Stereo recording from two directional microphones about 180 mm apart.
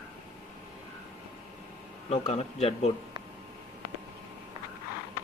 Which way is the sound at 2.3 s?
35° left (ahead or behind).